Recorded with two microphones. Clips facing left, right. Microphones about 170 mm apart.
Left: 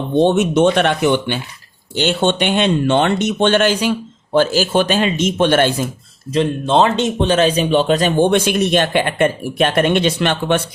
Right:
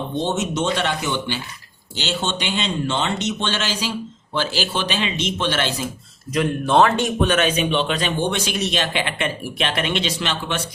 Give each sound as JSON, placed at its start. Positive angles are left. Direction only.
{"t": 0.2, "sound": "speech", "side_deg": 60}
{"t": 6.3, "sound": "speech", "side_deg": 25}